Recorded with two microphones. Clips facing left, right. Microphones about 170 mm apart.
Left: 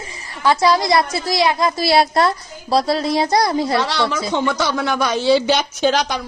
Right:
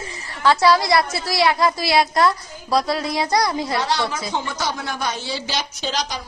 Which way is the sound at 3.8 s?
70° left (ahead or behind).